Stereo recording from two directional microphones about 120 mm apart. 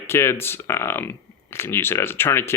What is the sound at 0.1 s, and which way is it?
Speech, 20° left (ahead or behind).